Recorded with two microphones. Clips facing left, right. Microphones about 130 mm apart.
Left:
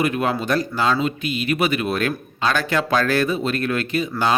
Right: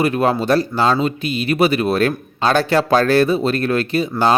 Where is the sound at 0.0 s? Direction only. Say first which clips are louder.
Right 4 dB; 35° right (ahead or behind).